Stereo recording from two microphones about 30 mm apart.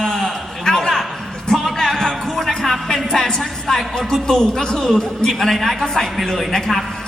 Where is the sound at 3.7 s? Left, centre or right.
Centre.